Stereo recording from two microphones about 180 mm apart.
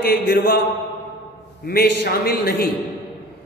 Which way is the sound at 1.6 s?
60° left (ahead or behind).